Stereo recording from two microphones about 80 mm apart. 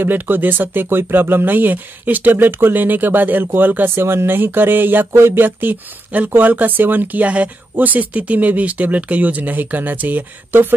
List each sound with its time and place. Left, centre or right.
0.0 s speech: right